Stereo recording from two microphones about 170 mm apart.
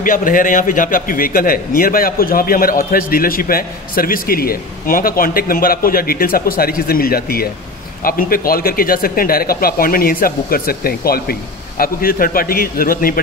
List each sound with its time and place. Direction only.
0.0 s a man's voice: 55° left (ahead or behind)